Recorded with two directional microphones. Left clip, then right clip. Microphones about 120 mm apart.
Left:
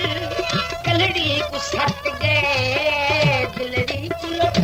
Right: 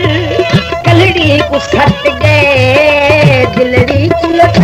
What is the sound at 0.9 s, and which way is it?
Music, 30° right (ahead or behind).